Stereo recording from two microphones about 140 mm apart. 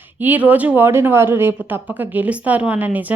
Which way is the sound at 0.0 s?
15° right (ahead or behind).